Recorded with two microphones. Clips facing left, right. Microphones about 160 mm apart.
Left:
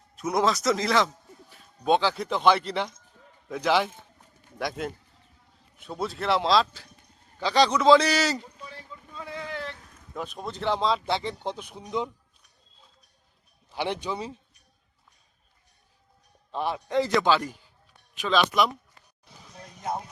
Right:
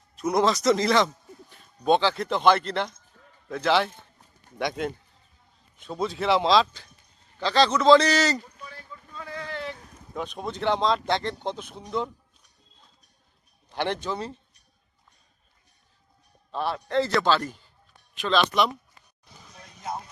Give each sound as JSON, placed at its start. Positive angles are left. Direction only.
{"t": 0.2, "sound": "a man's voice", "side_deg": 0}
{"t": 7.3, "sound": "a man's voice", "side_deg": 10}
{"t": 8.4, "sound": "a sound", "side_deg": 20}
{"t": 10.2, "sound": "speech", "side_deg": 0}
{"t": 13.7, "sound": "a man's voice", "side_deg": 5}
{"t": 16.5, "sound": "a man's voice", "side_deg": 15}